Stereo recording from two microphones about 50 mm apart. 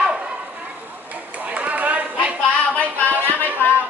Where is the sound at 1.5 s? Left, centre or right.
Right.